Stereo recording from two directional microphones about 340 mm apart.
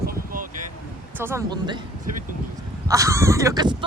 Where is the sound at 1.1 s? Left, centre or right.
Centre.